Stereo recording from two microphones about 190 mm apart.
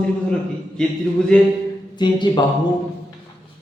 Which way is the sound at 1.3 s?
5° left (ahead or behind).